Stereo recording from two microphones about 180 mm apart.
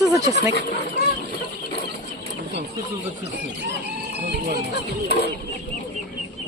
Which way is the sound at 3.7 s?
65° right (ahead or behind).